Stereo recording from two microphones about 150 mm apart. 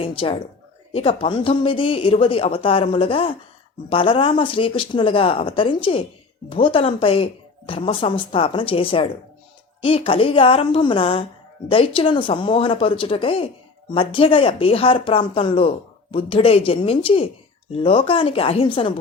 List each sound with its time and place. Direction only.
0.0 s speech: 35° left (ahead or behind)